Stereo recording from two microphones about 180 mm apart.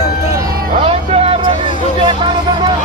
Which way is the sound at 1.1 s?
30° right (ahead or behind).